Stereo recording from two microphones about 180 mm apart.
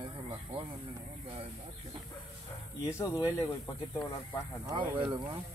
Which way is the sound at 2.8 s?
15° left (ahead or behind).